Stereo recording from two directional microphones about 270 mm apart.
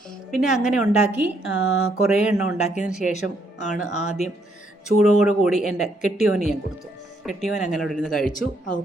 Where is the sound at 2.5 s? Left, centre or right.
Left.